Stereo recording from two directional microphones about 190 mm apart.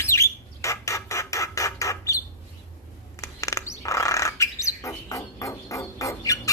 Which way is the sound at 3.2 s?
15° left (ahead or behind).